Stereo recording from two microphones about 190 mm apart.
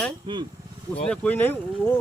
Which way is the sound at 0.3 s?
25° right (ahead or behind).